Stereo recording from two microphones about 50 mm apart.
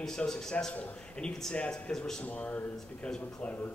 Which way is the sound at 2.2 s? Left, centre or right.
Left.